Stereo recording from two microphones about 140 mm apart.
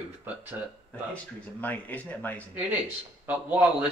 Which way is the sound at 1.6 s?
10° left (ahead or behind).